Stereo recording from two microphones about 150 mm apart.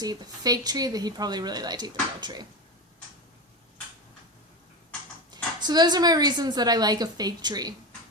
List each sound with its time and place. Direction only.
0.0 s speech: 25° right (ahead or behind)
5.3 s speech: 30° right (ahead or behind)